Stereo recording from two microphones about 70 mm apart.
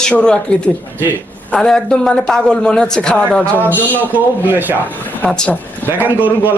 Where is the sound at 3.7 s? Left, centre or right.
Right.